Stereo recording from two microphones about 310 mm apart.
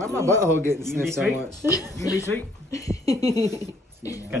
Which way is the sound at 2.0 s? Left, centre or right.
Centre.